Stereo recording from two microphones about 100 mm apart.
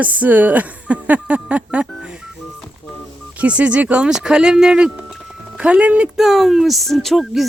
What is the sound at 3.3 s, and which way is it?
Speech, 15° right (ahead or behind).